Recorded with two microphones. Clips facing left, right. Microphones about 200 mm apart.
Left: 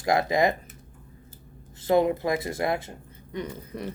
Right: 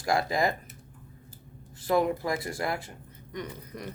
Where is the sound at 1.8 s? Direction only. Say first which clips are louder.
Left 4 dB; 25° left (ahead or behind).